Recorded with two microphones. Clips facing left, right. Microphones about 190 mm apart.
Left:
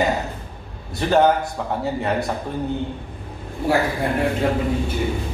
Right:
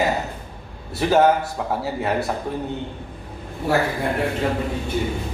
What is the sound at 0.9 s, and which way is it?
A man's voice, 5° right (ahead or behind).